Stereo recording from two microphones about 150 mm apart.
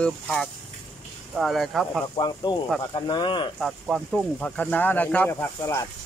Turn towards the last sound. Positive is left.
turn(degrees=20)  # may be behind; listen again after turning